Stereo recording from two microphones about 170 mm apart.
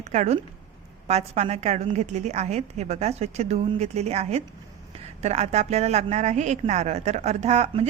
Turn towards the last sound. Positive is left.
turn(degrees=-40)  # may be behind; listen again after turning